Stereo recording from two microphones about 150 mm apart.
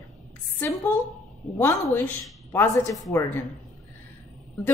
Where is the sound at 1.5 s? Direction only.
15° left (ahead or behind).